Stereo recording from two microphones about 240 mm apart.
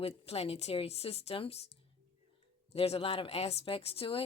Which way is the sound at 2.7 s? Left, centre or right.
Left.